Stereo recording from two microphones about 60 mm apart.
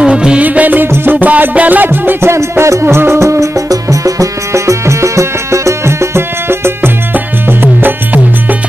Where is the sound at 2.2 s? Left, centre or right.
Right.